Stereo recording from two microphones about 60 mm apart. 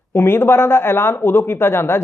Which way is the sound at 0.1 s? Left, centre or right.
Left.